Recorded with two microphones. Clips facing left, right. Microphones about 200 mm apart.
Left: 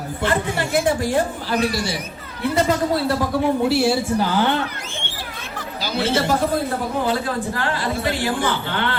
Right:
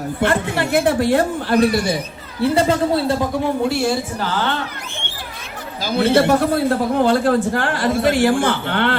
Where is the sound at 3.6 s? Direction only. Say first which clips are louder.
Left 1 dB; 10° left (ahead or behind).